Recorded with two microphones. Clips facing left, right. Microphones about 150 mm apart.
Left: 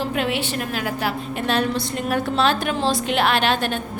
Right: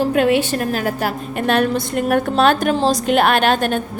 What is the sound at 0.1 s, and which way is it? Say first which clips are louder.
A woman's voice: right 8 dB; 50° right (ahead or behind).